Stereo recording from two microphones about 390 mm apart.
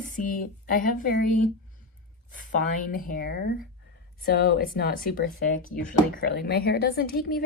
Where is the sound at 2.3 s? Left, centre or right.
Left.